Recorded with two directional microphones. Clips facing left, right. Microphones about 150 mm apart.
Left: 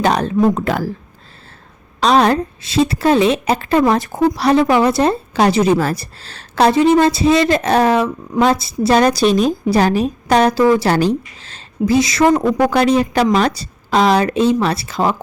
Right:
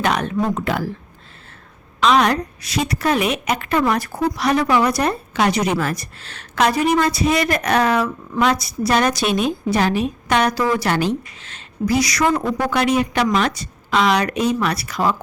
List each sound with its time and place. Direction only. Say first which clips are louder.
0.0 s a woman's voice: left 6 dB; 30° left (ahead or behind)
2.0 s a woman's voice: left 3 dB; 35° left (ahead or behind)